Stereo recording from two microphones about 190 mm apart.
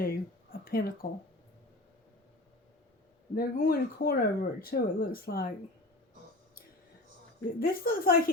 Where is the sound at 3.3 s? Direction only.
50° left (ahead or behind).